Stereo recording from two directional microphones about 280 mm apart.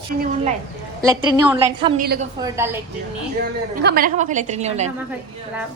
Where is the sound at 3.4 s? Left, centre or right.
Right.